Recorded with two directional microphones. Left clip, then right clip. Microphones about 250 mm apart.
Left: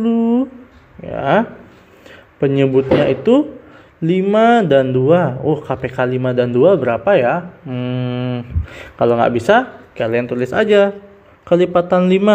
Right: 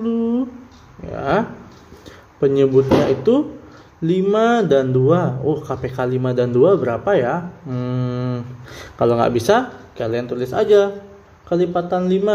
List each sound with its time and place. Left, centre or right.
0.0 s a sound: centre
1.1 s speech: centre
2.4 s speech: centre
4.0 s a man's voice: centre